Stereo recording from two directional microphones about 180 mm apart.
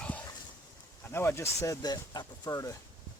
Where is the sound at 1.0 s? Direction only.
10° left (ahead or behind).